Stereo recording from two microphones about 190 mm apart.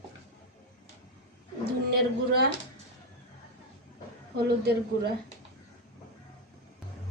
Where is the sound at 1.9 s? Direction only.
55° right (ahead or behind).